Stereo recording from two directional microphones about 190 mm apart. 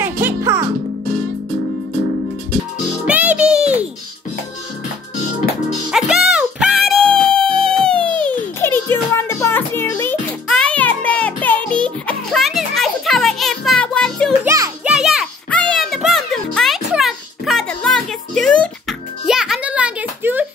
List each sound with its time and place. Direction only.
0.0 s music: 10° right (ahead or behind)
3.1 s music: 5° right (ahead or behind)
5.9 s music: centre (ahead or behind)
14.4 s music: 15° right (ahead or behind)
14.9 s music: centre (ahead or behind)